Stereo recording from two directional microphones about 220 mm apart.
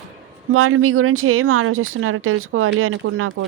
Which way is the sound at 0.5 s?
75° right (ahead or behind).